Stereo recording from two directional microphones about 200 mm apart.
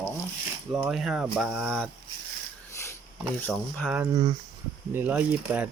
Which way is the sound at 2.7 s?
15° left (ahead or behind).